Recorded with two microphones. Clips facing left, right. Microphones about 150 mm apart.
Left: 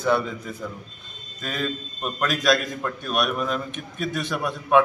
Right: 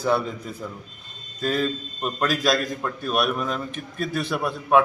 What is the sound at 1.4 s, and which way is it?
Speech, 35° right (ahead or behind).